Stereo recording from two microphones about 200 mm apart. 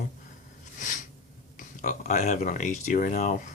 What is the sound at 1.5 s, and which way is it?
Speech, 40° left (ahead or behind).